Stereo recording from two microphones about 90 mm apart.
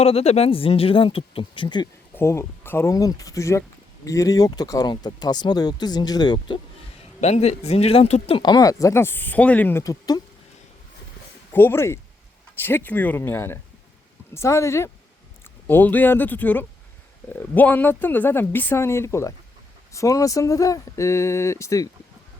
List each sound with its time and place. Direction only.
0.0 s speech: 90° left; by 1.9 s 60° left (ahead or behind)
2.1 s speech: 30° left (ahead or behind)
2.9 s speech: 40° left (ahead or behind)
7.9 s speech: 90° left
8.4 s speech: 45° left (ahead or behind); by 9.8 s 20° left (ahead or behind)
9.8 s speech: 40° left (ahead or behind)
11.5 s speech: 25° left (ahead or behind)
15.6 s speech: 20° left (ahead or behind)